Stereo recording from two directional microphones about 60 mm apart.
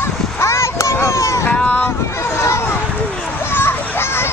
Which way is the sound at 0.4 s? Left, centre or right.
Left.